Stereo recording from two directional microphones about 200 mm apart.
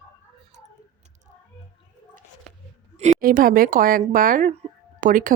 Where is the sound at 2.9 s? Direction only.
35° right (ahead or behind).